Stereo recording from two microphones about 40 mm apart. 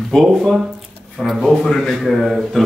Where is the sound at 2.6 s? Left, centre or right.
Centre.